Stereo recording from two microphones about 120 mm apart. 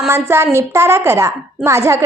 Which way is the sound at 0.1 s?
20° right (ahead or behind).